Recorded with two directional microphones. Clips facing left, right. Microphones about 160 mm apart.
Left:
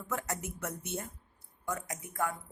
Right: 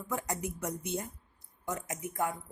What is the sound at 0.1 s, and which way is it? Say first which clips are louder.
A woman's voice: right 2 dB; 15° right (ahead or behind).